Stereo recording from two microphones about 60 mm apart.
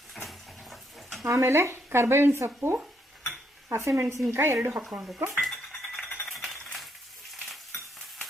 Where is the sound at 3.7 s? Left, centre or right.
Right.